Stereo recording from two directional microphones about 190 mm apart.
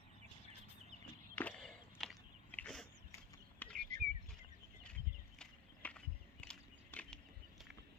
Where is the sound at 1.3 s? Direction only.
5° left (ahead or behind).